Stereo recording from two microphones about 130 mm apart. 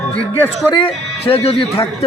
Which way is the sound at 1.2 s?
45° left (ahead or behind).